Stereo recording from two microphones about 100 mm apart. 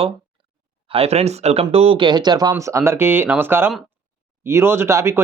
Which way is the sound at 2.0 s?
45° right (ahead or behind).